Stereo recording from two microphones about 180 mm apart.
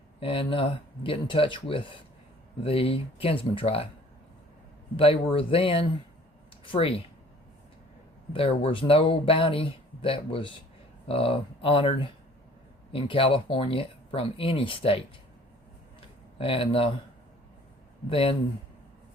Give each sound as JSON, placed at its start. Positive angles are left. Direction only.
{"t": 0.2, "sound": "speech", "side_deg": 30}
{"t": 4.9, "sound": "speech", "side_deg": 30}
{"t": 8.3, "sound": "speech", "side_deg": 30}
{"t": 16.0, "sound": "a sound", "side_deg": 30}
{"t": 18.1, "sound": "speech", "side_deg": 30}